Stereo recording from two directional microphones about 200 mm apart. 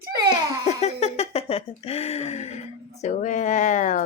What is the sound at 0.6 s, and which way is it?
A woman's voice, 35° left (ahead or behind).